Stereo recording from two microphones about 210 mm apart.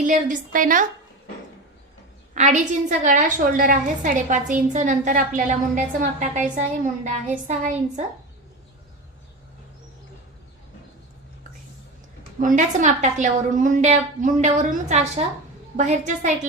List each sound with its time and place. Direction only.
0.0 s a woman's voice: 35° right (ahead or behind)
2.3 s a woman's voice: 35° right (ahead or behind)
12.4 s a woman's voice: 35° right (ahead or behind)